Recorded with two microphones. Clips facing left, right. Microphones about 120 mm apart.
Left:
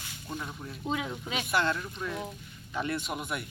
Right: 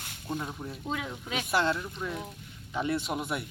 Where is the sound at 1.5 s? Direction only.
30° right (ahead or behind).